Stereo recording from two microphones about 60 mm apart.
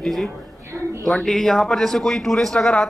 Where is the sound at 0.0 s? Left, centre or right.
Centre.